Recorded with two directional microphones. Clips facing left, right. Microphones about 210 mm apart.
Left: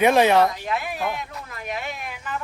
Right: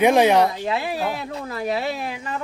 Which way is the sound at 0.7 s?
30° right (ahead or behind).